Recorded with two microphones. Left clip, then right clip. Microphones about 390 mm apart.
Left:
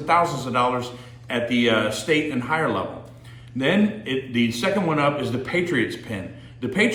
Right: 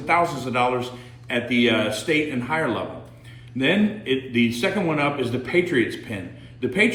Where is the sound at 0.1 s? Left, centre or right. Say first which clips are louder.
Left 1 dB; centre.